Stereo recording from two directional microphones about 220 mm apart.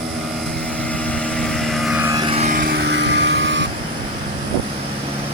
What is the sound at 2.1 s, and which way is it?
Vehicle, 20° right (ahead or behind).